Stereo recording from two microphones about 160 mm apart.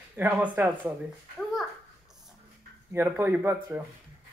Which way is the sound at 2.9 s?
10° right (ahead or behind).